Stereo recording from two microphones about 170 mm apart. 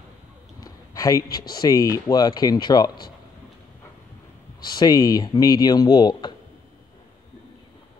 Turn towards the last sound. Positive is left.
turn(degrees=25)  # may be behind; listen again after turning